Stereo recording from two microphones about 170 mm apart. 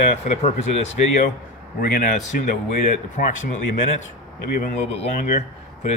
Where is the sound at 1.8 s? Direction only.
55° left (ahead or behind).